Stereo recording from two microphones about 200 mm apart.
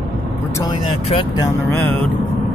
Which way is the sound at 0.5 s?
25° left (ahead or behind).